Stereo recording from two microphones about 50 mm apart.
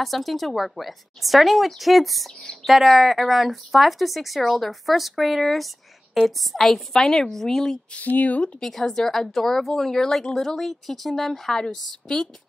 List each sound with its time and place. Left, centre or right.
0.0 s a woman's voice: centre
7.9 s speech: left
8.5 s speech: centre